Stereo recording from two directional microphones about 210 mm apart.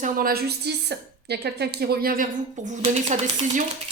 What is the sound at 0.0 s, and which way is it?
A woman's voice, 45° right (ahead or behind).